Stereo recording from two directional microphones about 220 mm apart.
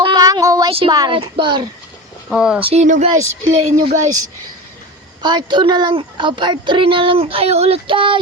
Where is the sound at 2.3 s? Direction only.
5° right (ahead or behind).